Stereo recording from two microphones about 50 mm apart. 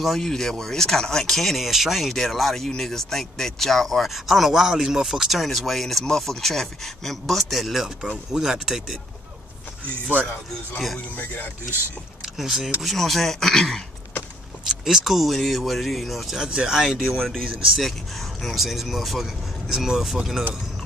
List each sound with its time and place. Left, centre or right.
0.0 s speech: centre
8.3 s speech: centre
11.1 s speech: left
12.4 s speech: centre
12.8 s speech: centre
14.7 s speech: centre
16.4 s speech: centre
17.2 s speech: centre